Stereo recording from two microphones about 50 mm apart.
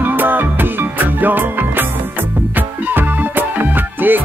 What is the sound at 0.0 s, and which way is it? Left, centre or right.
Music, right.